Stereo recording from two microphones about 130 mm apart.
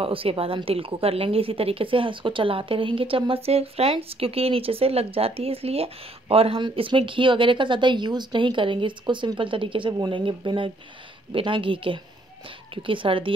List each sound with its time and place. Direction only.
0.0 s speech: 45° right (ahead or behind)